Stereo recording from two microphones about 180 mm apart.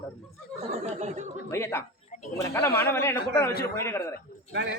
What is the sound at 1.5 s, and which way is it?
A man's voice, 15° left (ahead or behind).